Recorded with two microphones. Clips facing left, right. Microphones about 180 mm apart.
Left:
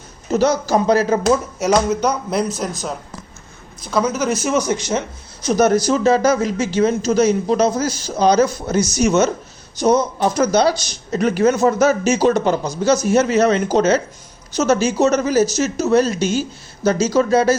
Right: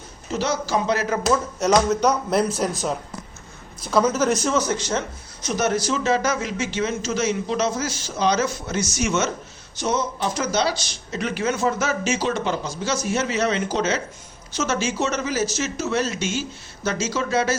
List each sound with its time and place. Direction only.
0.3 s speech: 45° left (ahead or behind)
1.5 s speech: 5° left (ahead or behind)
3.8 s speech: 5° right (ahead or behind); by 5.0 s 15° left (ahead or behind)
5.5 s speech: 40° left (ahead or behind)